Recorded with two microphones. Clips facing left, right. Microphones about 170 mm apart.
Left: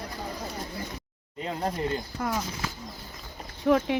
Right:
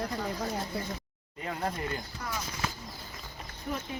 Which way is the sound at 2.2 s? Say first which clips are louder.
Left 9 dB; 50° left (ahead or behind).